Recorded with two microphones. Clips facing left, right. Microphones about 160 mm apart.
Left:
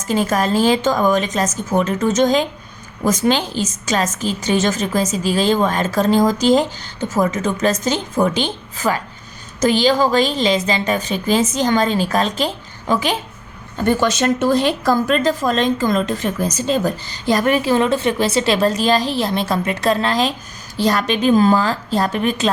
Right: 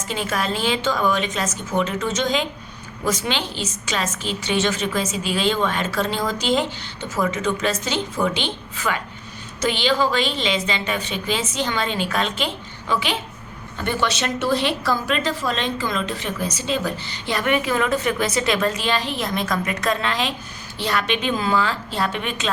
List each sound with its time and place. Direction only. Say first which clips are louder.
0.1 s a woman's voice: left 8 dB; 40° left (ahead or behind)